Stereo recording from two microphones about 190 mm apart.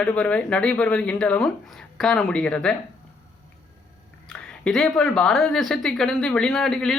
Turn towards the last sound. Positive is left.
turn(degrees=5)  # may be behind; listen again after turning